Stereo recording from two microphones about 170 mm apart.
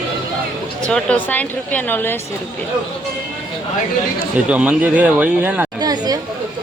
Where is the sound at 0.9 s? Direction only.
10° left (ahead or behind).